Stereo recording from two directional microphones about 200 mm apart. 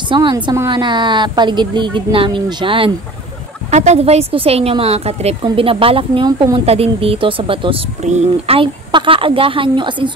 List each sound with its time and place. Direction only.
0.1 s a woman's voice: 25° right (ahead or behind)